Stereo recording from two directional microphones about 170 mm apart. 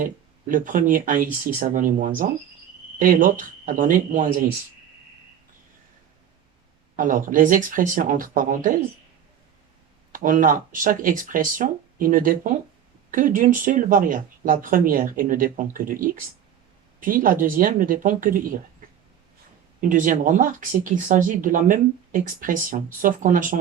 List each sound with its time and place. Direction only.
0.0 s speech: 50° right (ahead or behind)
6.9 s speech: 50° right (ahead or behind)
10.1 s speech: 50° right (ahead or behind)
19.8 s speech: 50° right (ahead or behind)